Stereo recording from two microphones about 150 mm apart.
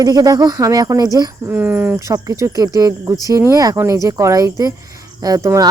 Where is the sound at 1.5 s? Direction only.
10° right (ahead or behind).